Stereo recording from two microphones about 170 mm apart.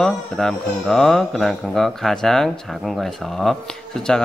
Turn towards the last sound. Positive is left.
turn(degrees=5)  # may be behind; listen again after turning